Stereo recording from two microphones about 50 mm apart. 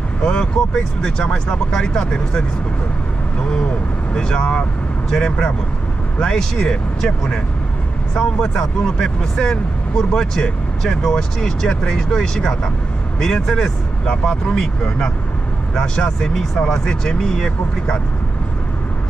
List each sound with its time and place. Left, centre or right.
0.2 s speech: centre
4.1 s speech: centre